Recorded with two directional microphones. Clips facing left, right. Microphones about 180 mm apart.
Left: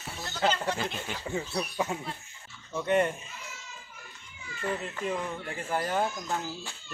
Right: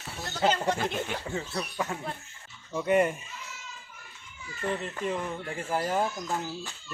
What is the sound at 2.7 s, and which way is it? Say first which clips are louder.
Speech: right 2 dB; 10° right (ahead or behind).